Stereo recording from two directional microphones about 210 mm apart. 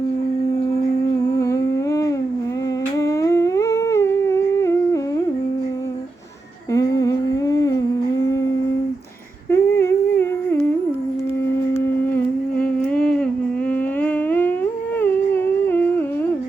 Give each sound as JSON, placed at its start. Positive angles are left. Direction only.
{"t": 1.4, "sound": "humming", "side_deg": 15}
{"t": 6.7, "sound": "humming", "side_deg": 15}
{"t": 9.5, "sound": "humming", "side_deg": 10}
{"t": 12.1, "sound": "humming", "side_deg": 5}